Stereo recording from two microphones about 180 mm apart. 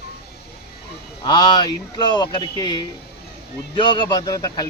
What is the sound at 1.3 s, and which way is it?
A man's voice, 25° left (ahead or behind).